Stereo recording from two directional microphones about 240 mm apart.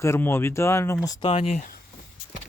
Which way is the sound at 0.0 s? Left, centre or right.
Centre.